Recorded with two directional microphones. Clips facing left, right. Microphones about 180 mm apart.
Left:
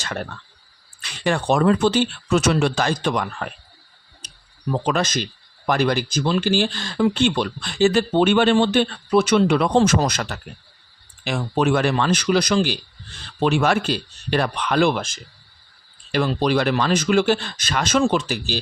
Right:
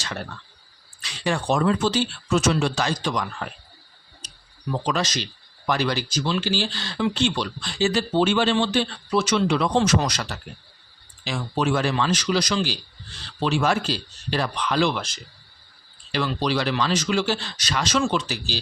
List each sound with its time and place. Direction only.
1.0 s speech: 60° left (ahead or behind)
4.9 s speech: 55° left (ahead or behind)